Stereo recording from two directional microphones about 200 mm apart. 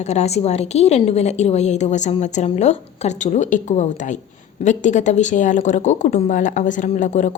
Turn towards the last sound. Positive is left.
turn(degrees=40)  # may be behind; listen again after turning